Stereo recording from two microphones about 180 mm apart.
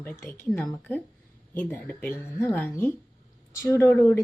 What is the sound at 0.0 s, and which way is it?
Speech, 10° left (ahead or behind).